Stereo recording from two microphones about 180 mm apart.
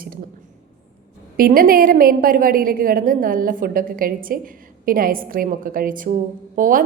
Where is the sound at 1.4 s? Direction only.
55° right (ahead or behind).